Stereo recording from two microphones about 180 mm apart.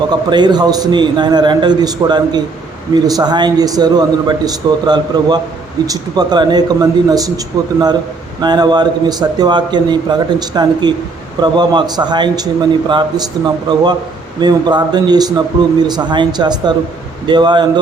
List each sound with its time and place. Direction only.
0.1 s a man's voice: 25° right (ahead or behind)